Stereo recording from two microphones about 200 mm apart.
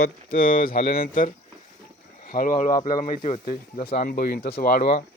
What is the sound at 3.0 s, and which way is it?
Speech, 35° left (ahead or behind).